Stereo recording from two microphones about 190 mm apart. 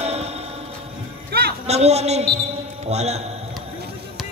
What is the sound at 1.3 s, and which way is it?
Music, 55° right (ahead or behind).